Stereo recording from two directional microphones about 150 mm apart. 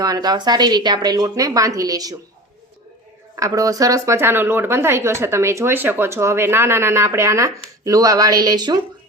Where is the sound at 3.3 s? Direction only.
20° right (ahead or behind).